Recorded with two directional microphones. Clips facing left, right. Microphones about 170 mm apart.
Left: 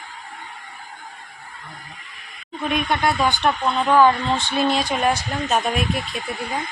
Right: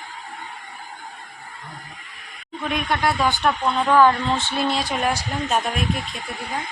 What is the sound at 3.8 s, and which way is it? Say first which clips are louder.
Speech: left 1 dB; 10° left (ahead or behind).